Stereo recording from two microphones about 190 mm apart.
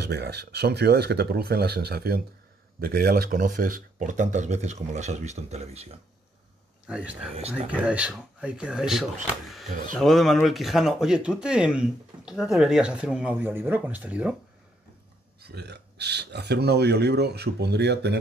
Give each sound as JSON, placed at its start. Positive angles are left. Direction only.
{"t": 0.0, "sound": "speech", "side_deg": -60}
{"t": 6.9, "sound": "speech", "side_deg": -5}
{"t": 15.4, "sound": "speech", "side_deg": -60}